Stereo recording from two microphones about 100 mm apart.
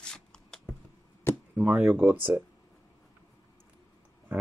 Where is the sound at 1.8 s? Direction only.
20° right (ahead or behind).